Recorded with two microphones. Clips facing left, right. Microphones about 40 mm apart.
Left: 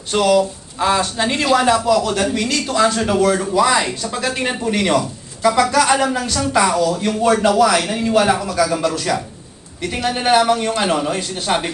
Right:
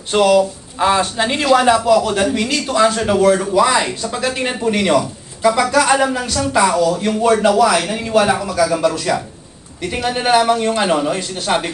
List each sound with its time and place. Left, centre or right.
0.1 s a man's voice: right; by 11.7 s centre